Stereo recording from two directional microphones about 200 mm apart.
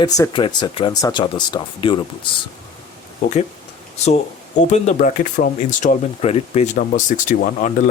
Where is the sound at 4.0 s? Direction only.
35° left (ahead or behind).